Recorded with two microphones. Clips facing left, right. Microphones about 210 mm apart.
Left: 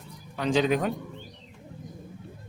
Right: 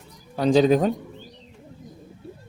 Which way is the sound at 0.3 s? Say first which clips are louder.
Right 7 dB; 35° right (ahead or behind).